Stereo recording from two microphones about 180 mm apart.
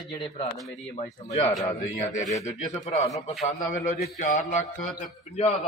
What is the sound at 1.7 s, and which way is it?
A man's voice, 35° left (ahead or behind).